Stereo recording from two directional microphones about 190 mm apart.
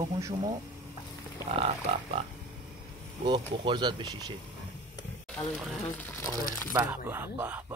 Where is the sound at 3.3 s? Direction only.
25° right (ahead or behind).